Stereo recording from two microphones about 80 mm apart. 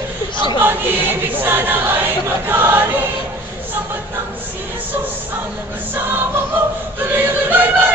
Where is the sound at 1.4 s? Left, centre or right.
Right.